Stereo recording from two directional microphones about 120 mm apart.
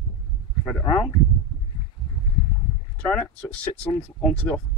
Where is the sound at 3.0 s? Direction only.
10° left (ahead or behind).